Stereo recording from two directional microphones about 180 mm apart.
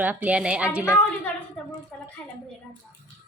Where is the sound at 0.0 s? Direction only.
10° right (ahead or behind).